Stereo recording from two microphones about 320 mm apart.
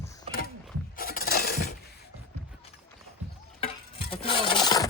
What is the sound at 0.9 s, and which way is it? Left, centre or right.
Glass, left.